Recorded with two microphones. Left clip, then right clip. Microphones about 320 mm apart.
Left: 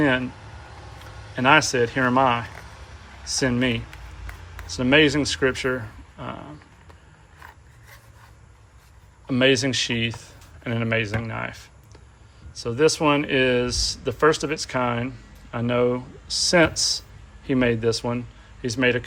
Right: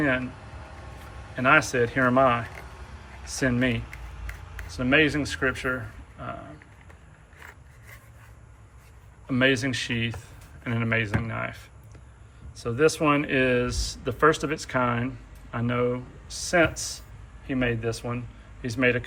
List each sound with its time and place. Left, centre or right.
1.4 s speech: centre
9.2 s speech: centre